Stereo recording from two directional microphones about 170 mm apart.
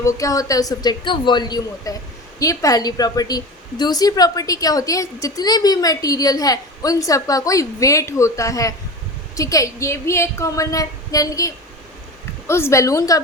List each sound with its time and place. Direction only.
0.0 s a woman's voice: 20° left (ahead or behind)